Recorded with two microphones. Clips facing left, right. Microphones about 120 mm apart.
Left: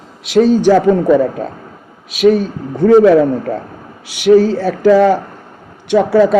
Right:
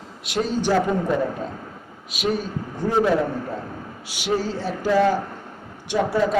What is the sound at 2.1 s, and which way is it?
Speech, 85° left.